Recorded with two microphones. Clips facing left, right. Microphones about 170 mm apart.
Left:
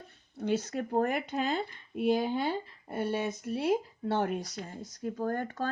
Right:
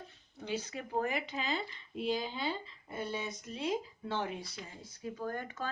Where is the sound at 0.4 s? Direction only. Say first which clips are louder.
Left 8 dB; 50° left (ahead or behind).